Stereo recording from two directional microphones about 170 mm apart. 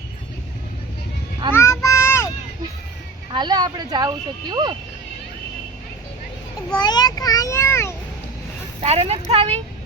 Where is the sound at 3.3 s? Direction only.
25° right (ahead or behind).